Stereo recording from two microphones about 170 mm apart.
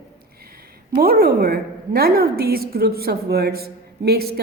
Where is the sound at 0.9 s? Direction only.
60° right (ahead or behind).